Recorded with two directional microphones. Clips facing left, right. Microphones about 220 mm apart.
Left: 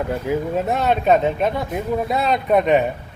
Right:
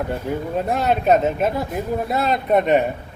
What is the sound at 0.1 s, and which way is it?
Speech, centre (ahead or behind).